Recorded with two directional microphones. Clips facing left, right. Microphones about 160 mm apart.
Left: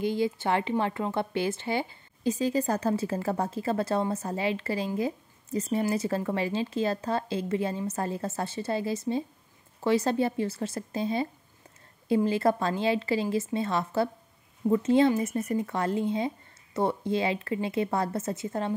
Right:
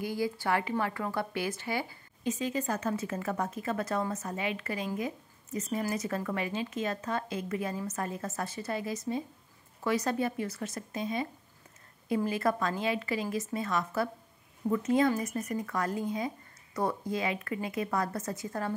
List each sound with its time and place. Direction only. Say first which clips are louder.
0.0 s speech: left 5 dB; 25° left (ahead or behind)